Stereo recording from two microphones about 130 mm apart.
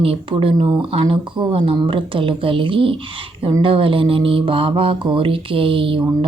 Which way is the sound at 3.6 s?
45° right (ahead or behind).